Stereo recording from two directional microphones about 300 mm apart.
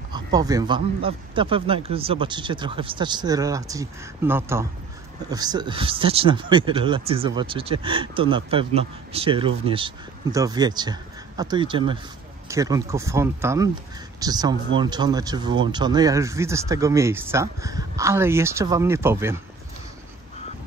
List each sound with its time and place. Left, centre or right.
0.1 s speech: centre